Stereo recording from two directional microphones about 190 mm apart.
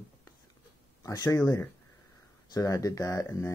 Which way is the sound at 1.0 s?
20° left (ahead or behind).